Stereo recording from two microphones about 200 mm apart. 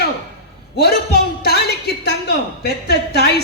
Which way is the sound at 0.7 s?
55° left (ahead or behind).